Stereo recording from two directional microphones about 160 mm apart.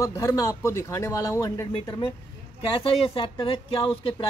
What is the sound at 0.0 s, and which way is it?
Speech, 20° left (ahead or behind).